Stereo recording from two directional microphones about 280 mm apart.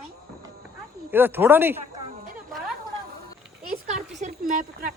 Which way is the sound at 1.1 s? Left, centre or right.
Centre.